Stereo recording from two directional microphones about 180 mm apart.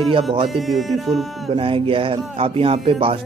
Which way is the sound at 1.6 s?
30° right (ahead or behind).